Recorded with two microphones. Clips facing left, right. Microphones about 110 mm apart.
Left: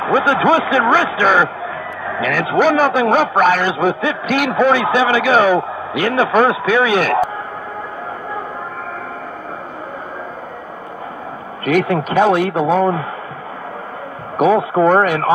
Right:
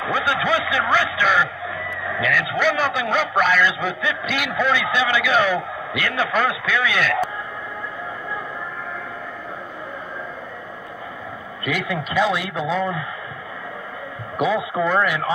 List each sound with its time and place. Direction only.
0.0 s a man's voice: 45° left (ahead or behind)
11.6 s a man's voice: 50° left (ahead or behind)
14.3 s a man's voice: 50° left (ahead or behind)